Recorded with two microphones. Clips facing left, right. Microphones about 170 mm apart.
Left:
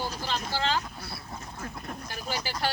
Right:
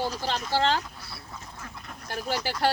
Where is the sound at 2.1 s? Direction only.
60° right (ahead or behind).